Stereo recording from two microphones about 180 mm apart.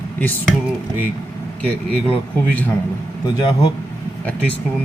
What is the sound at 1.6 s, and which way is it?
Speech, 5° left (ahead or behind).